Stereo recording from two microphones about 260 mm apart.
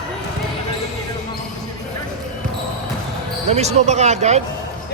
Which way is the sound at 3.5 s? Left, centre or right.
Right.